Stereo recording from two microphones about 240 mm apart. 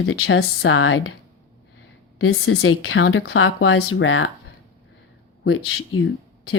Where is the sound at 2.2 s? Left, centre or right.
Left.